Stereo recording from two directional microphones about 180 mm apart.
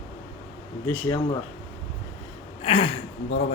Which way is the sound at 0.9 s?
10° left (ahead or behind).